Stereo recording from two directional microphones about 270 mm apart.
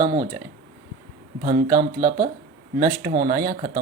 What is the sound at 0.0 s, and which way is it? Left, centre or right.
Speech, centre.